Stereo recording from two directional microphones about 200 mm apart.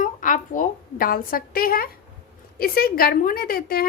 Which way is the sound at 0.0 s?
40° left (ahead or behind).